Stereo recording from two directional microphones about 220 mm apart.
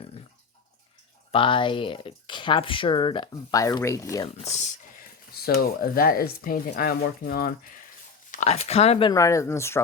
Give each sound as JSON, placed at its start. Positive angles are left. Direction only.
{"t": 1.3, "sound": "speech", "side_deg": 25}
{"t": 4.4, "sound": "speech", "side_deg": 30}
{"t": 8.3, "sound": "speech", "side_deg": 30}